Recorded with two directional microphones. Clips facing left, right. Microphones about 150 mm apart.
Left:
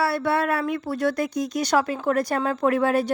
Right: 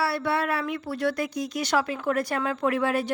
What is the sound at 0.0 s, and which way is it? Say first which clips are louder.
A woman's voice: left 3 dB; 50° left (ahead or behind).